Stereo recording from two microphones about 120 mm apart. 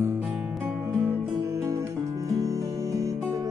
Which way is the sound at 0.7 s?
15° right (ahead or behind).